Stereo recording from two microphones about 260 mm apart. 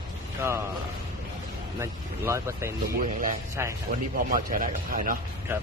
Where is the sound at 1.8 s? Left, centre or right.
Centre.